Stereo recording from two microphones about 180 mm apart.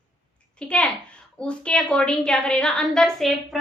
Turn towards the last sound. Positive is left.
turn(degrees=0)  # may be behind; listen again after turning